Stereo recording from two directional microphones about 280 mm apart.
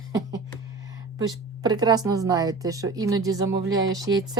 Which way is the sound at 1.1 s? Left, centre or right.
Centre.